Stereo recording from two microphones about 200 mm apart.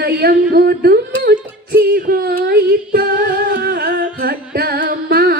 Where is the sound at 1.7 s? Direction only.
50° right (ahead or behind).